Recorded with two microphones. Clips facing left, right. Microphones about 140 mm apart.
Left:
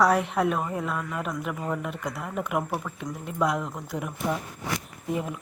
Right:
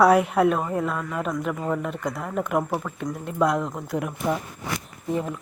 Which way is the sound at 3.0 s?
Centre (ahead or behind).